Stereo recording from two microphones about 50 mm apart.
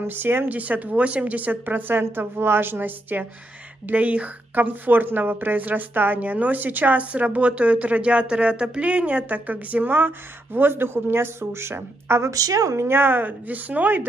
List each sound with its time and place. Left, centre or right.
0.0 s speech: right
0.5 s a woman's voice: right
3.9 s a woman's voice: right